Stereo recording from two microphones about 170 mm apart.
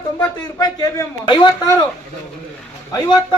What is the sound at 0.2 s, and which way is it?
A man's voice, 20° left (ahead or behind).